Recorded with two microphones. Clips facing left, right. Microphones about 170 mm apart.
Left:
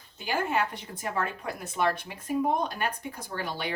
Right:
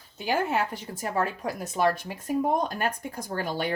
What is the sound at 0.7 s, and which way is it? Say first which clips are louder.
A woman's voice: right 3 dB; 40° right (ahead or behind).